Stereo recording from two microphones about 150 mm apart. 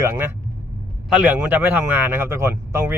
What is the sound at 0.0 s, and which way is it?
A man's voice, 15° right (ahead or behind).